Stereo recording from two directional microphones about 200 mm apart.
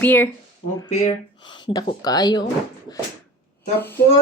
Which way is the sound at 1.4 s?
25° left (ahead or behind).